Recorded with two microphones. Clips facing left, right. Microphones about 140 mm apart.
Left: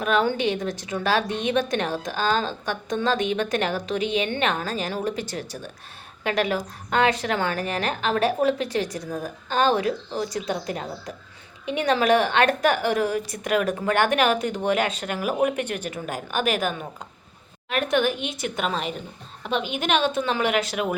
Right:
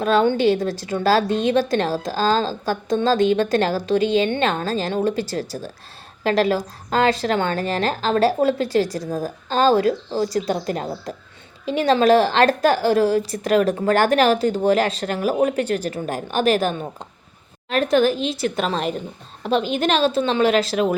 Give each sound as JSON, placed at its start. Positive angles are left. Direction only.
{"t": 0.0, "sound": "a woman's voice", "side_deg": -30}